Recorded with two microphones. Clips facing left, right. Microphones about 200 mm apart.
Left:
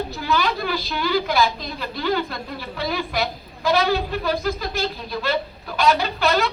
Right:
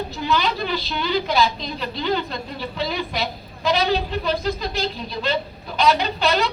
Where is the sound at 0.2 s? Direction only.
20° right (ahead or behind).